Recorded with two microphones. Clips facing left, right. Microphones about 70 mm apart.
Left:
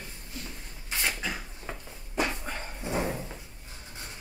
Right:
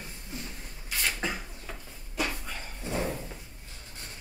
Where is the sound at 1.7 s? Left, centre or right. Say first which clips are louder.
Left 3 dB; left.